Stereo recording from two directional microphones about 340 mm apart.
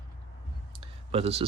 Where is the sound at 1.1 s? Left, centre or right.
Centre.